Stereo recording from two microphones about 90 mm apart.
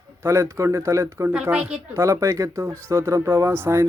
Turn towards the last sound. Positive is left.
turn(degrees=-25)  # may be behind; listen again after turning